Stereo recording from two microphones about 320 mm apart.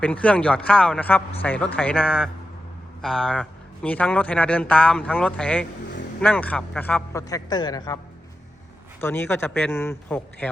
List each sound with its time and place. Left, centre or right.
0.0 s a man's voice: centre
9.0 s a man's voice: centre